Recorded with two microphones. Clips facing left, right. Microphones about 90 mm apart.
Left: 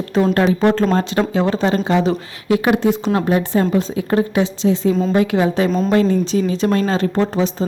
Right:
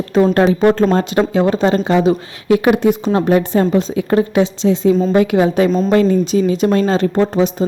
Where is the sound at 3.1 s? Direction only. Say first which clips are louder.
Right 3 dB; 30° right (ahead or behind).